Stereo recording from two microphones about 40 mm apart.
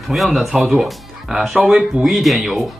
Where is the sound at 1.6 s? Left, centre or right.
Centre.